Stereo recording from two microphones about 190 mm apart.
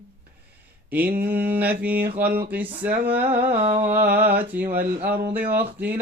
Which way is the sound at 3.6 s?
35° right (ahead or behind).